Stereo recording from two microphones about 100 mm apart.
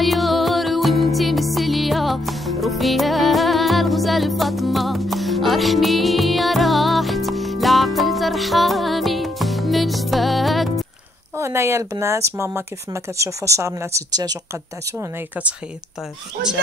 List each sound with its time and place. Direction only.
0.0 s music: centre (ahead or behind)
11.3 s speech: 30° right (ahead or behind)
14.5 s speech: 25° right (ahead or behind)